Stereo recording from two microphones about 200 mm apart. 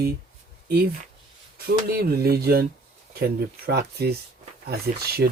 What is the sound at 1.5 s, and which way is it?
Speech, 50° right (ahead or behind).